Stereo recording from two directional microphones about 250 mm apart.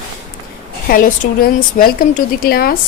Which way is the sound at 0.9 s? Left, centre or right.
Left.